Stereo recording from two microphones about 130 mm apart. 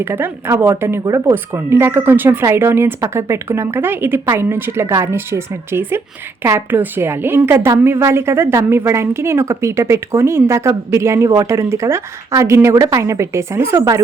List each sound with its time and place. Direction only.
0.0 s a woman's voice: 20° right (ahead or behind)